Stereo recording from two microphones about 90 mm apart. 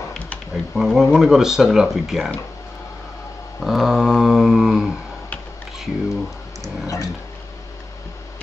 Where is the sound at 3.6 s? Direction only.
Centre (ahead or behind).